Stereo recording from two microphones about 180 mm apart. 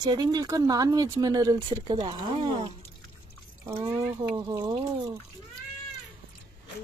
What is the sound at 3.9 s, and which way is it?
Speech, 20° right (ahead or behind).